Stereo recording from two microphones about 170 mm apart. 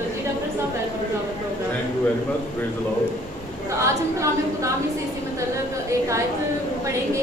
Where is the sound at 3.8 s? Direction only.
15° right (ahead or behind).